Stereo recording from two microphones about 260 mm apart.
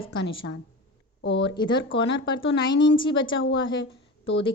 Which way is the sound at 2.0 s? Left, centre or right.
Left.